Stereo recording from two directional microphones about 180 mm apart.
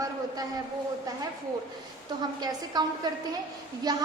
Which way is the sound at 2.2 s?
25° right (ahead or behind).